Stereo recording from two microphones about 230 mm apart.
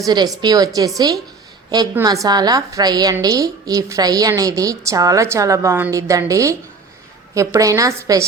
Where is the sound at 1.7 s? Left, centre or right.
Centre.